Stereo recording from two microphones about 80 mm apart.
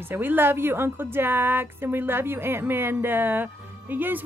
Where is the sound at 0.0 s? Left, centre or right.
Right.